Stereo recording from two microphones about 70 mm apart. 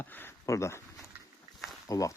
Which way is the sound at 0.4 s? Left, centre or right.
Left.